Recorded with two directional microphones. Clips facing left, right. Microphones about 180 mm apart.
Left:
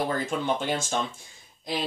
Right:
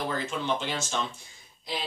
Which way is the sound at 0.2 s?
50° left (ahead or behind).